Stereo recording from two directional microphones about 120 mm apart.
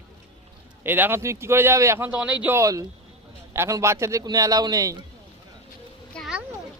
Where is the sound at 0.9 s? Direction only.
15° right (ahead or behind).